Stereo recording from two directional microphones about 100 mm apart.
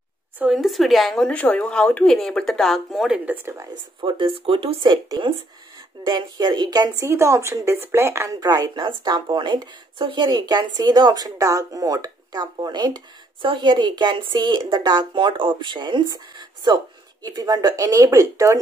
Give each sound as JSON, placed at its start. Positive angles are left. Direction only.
{"t": 0.5, "sound": "speech", "side_deg": 0}
{"t": 3.1, "sound": "speech", "side_deg": -15}
{"t": 4.0, "sound": "speech", "side_deg": -65}
{"t": 6.0, "sound": "speech", "side_deg": -45}
{"t": 7.1, "sound": "a woman's voice", "side_deg": -30}
{"t": 8.4, "sound": "a woman's voice", "side_deg": -40}
{"t": 8.7, "sound": "speech", "side_deg": -50}